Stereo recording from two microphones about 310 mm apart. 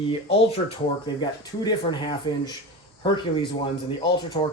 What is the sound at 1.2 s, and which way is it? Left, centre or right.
Speech, centre.